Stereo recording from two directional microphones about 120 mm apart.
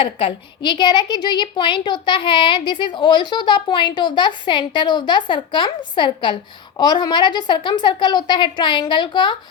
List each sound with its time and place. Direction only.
0.0 s a woman's voice: 45° left (ahead or behind)